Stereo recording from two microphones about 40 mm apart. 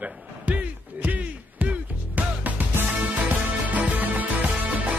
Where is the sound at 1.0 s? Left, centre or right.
Right.